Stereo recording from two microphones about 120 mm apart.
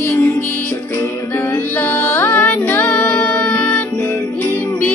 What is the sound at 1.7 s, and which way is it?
Music, 20° left (ahead or behind).